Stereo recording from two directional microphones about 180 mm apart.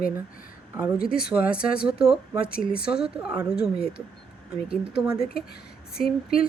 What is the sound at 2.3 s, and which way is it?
Speech, 55° left (ahead or behind).